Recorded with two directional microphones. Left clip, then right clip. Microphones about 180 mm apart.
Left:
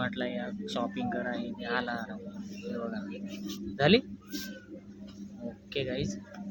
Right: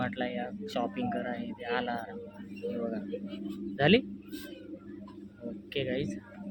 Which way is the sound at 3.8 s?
Centre (ahead or behind).